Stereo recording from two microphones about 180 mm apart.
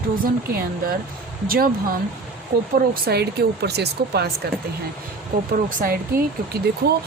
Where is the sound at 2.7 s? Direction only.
55° right (ahead or behind).